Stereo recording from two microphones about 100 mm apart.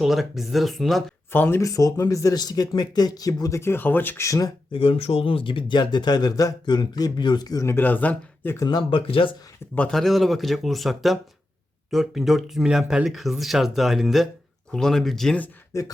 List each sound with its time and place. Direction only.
0.0 s speech: centre (ahead or behind)
1.3 s speech: 20° left (ahead or behind)
3.6 s speech: 20° left (ahead or behind)
4.3 s speech: 35° left (ahead or behind)
4.7 s speech: 65° left (ahead or behind); by 8.5 s 15° left (ahead or behind)
8.6 s speech: 45° left (ahead or behind)
9.0 s speech: 60° left (ahead or behind)
9.7 s speech: 10° left (ahead or behind)
15.7 s speech: 30° left (ahead or behind)